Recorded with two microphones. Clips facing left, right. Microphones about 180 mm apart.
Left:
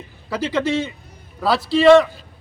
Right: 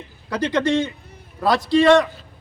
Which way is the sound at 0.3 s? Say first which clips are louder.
Right 1 dB; 5° left (ahead or behind).